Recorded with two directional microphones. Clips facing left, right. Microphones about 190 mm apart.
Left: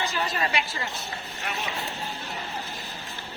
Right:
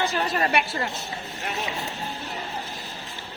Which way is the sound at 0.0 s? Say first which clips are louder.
Right 4 dB; 60° right (ahead or behind).